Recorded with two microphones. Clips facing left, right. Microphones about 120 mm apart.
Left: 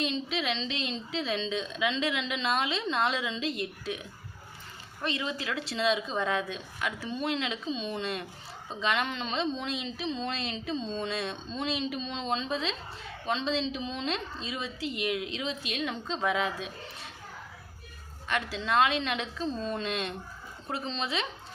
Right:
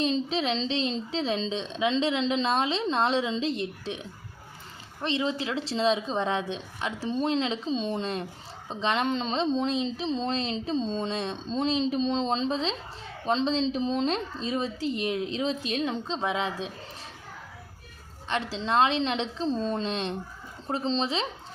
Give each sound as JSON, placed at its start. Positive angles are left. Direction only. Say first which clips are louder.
{"t": 0.0, "sound": "speech", "louder": "right 5 dB", "side_deg": -35}
{"t": 18.3, "sound": "speech", "louder": "right 2 dB", "side_deg": -30}